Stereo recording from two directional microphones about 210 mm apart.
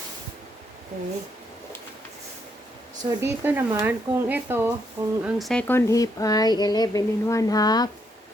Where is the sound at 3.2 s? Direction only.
10° right (ahead or behind).